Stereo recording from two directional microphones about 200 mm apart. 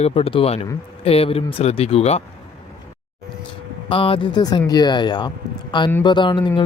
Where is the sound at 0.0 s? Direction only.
30° left (ahead or behind).